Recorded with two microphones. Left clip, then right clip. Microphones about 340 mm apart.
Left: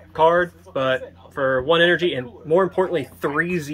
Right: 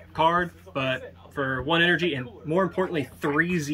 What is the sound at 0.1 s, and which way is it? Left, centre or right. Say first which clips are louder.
Speech: left 6 dB; centre.